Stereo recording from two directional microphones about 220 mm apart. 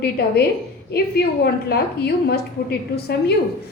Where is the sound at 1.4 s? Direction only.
45° left (ahead or behind).